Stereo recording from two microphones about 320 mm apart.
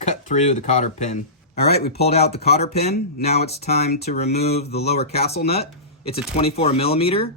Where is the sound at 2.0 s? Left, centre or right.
Centre.